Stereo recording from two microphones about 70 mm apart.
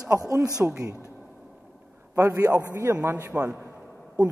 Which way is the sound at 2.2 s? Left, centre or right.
Right.